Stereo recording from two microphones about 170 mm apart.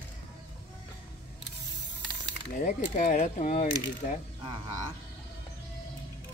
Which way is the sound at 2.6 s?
45° left (ahead or behind).